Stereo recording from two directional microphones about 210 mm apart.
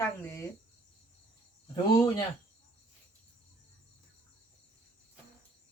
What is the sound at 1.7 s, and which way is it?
Speech, 20° left (ahead or behind).